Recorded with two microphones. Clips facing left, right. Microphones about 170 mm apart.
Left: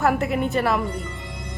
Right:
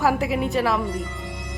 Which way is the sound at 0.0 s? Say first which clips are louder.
Even; centre (ahead or behind).